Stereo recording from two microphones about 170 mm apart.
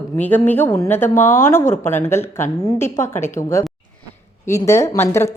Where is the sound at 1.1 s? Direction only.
45° left (ahead or behind).